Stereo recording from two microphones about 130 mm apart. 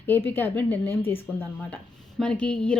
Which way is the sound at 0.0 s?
15° left (ahead or behind).